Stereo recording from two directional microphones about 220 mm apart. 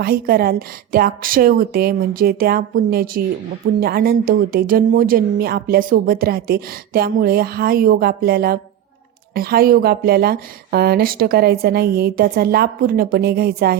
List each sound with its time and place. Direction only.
0.0 s speech: 45° right (ahead or behind)